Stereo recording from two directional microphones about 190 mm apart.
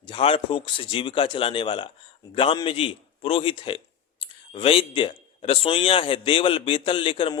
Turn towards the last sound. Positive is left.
turn(degrees=25)  # may be behind; listen again after turning